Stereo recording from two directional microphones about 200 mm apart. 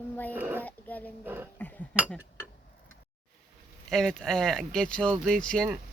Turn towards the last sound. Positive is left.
turn(degrees=5)  # may be behind; listen again after turning